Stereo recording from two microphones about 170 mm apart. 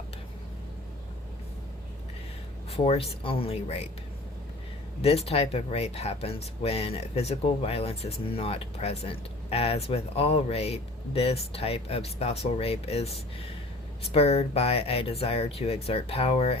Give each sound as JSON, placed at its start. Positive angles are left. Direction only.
{"t": 2.7, "sound": "speech", "side_deg": 35}
{"t": 5.0, "sound": "speech", "side_deg": 35}